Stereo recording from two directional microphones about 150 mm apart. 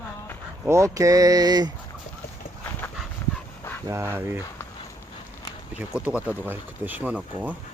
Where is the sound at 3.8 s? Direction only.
15° right (ahead or behind).